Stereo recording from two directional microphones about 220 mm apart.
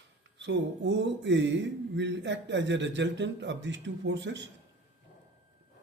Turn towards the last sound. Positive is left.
turn(degrees=-55)  # may be behind; listen again after turning